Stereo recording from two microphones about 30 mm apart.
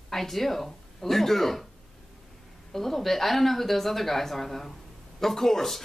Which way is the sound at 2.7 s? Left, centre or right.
Centre.